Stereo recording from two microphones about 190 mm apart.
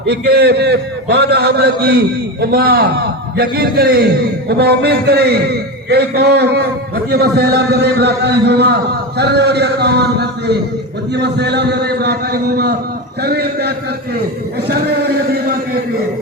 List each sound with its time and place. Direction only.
0.1 s a man's voice: 60° right (ahead or behind)